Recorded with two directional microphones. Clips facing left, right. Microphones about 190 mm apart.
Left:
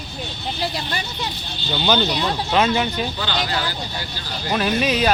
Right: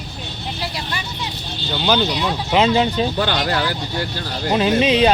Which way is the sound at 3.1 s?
60° right (ahead or behind).